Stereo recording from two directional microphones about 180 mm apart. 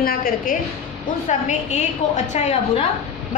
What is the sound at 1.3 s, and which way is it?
A woman's voice, 40° left (ahead or behind).